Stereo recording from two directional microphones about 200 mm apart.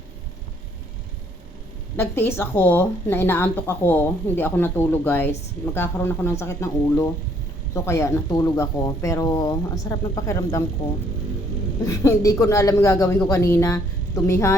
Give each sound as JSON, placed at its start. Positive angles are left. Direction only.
{"t": 2.0, "sound": "speech", "side_deg": 10}
{"t": 11.9, "sound": "speech", "side_deg": 15}